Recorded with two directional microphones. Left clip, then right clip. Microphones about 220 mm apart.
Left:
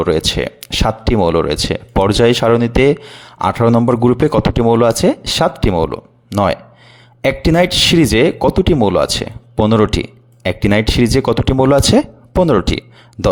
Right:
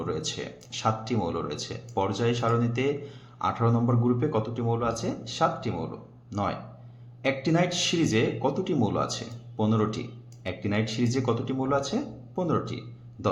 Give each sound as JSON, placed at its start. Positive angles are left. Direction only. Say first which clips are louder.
{"t": 0.0, "sound": "speech", "louder": "left 17 dB", "side_deg": 50}